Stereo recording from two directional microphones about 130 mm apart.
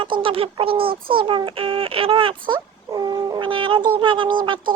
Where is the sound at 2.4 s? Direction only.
35° right (ahead or behind).